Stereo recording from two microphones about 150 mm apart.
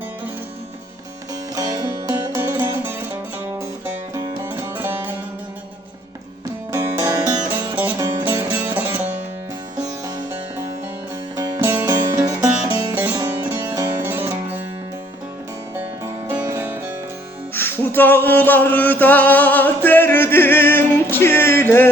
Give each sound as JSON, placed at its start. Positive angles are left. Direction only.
{"t": 1.5, "sound": "music", "side_deg": -25}
{"t": 6.7, "sound": "music", "side_deg": -20}
{"t": 13.1, "sound": "music", "side_deg": -25}
{"t": 15.7, "sound": "music", "side_deg": -15}
{"t": 17.5, "sound": "music", "side_deg": 15}